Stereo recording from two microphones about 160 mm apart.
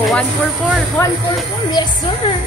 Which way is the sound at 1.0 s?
15° left (ahead or behind).